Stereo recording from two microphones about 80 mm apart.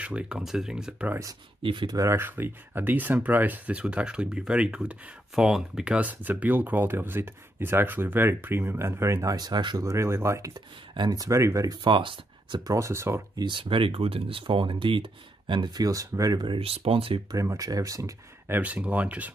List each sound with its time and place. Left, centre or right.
0.0 s speech: centre
1.6 s speech: right
1.9 s speech: right
2.1 s speech: right
9.3 s speech: right
9.8 s speech: right
11.0 s speech: right
11.8 s speech: right
12.6 s speech: right
13.4 s speech: right
18.5 s speech: centre